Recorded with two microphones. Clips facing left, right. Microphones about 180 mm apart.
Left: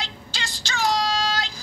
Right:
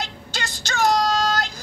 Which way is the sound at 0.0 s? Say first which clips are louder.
Right 3 dB; 45° right (ahead or behind).